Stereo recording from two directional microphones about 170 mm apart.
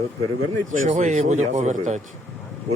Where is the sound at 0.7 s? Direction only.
45° right (ahead or behind).